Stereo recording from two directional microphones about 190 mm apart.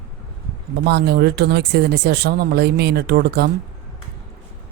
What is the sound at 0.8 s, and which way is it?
Speech, 60° right (ahead or behind).